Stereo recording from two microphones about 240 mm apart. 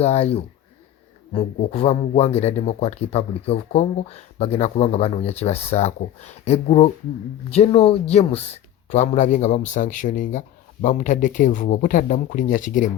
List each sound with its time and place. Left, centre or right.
0.0 s speech: left